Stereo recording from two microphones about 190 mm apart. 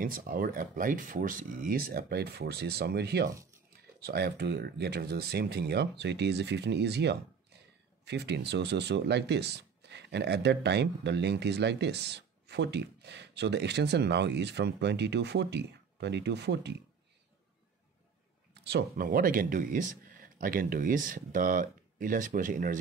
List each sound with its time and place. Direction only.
0.0 s speech: 45° right (ahead or behind); by 16.7 s 65° right (ahead or behind)
18.5 s speech: 60° right (ahead or behind); by 22.8 s 45° right (ahead or behind)